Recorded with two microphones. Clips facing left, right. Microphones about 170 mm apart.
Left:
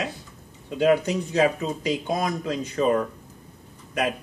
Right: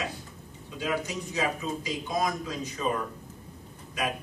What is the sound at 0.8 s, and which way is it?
A man's voice, 65° left (ahead or behind).